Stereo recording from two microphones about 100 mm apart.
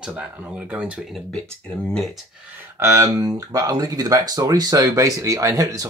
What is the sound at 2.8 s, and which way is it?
Speech, 30° right (ahead or behind).